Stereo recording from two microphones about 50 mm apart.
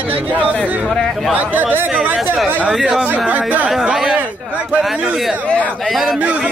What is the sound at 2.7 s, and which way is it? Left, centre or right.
Speech, centre.